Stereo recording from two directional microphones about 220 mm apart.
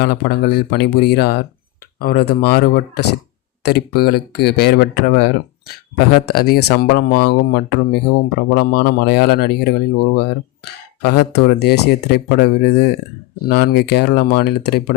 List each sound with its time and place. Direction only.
0.0 s speech: 45° left (ahead or behind)